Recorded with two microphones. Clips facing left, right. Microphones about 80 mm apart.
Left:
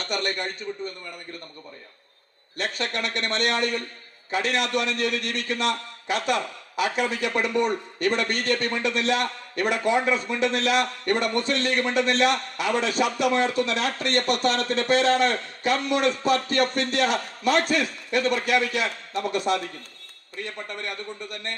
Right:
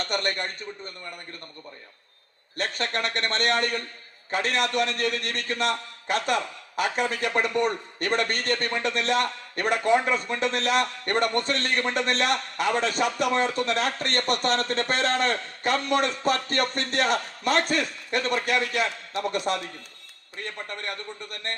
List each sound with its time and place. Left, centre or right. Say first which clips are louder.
0.1 s a man's voice: left 3 dB; right
2.6 s a man's voice: even; right
20.4 s a man's voice: left 1 dB; right